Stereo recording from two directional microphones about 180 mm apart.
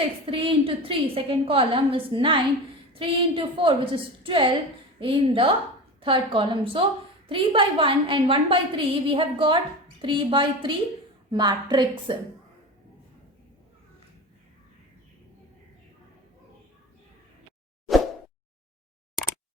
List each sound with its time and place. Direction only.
0.3 s a woman's voice: 30° right (ahead or behind)